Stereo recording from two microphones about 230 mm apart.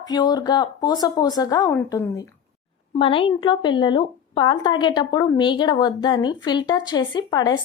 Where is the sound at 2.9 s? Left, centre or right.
Left.